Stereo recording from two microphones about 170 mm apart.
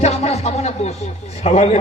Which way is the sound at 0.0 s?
40° left (ahead or behind).